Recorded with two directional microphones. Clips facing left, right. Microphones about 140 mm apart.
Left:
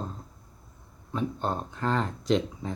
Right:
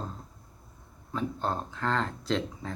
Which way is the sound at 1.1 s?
5° left (ahead or behind).